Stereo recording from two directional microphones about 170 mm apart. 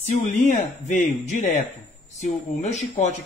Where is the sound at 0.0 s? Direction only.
45° left (ahead or behind).